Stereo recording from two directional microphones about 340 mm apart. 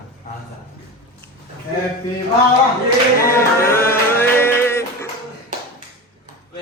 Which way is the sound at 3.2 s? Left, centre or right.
Centre.